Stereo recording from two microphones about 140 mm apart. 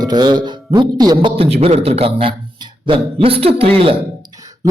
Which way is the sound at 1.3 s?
45° right (ahead or behind).